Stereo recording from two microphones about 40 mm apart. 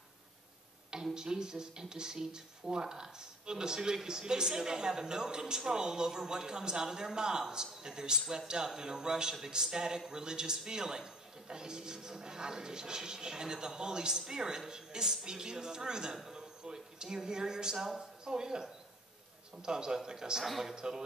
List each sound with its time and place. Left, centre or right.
1.1 s a man's voice: centre
20.4 s speech: centre
20.7 s a man's voice: centre